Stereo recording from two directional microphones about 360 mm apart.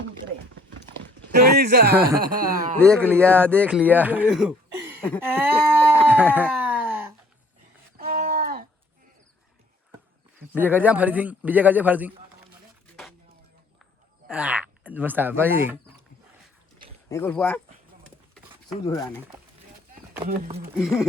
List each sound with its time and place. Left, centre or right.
1.3 s speech: right
2.8 s speech: centre
5.2 s sheep: centre
7.9 s a sound: right
10.5 s speech: centre
14.3 s speech: centre
17.1 s speech: centre
20.2 s speech: right
20.7 s speech: centre